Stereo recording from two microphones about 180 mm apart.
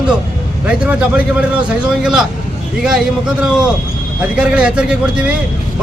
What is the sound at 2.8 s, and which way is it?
A man's voice, 5° right (ahead or behind).